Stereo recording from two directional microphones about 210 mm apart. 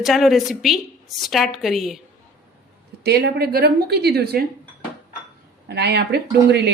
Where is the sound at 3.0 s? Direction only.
50° right (ahead or behind).